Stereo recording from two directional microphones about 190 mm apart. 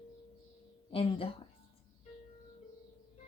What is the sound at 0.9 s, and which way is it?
Speech, 30° left (ahead or behind).